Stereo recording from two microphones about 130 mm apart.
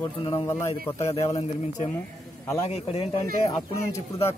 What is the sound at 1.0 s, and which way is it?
A man's voice, 50° left (ahead or behind).